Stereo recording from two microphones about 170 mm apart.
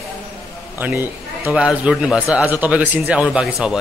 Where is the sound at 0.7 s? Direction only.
10° right (ahead or behind).